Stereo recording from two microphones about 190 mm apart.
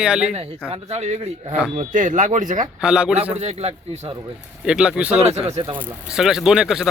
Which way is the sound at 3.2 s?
35° right (ahead or behind).